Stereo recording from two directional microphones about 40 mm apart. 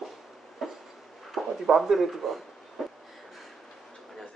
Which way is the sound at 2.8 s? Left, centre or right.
Centre.